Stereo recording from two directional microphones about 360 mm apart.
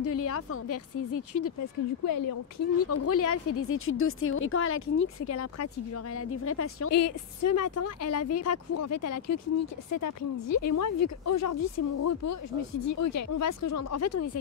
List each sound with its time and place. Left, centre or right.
0.0 s speech: left
2.8 s speech: left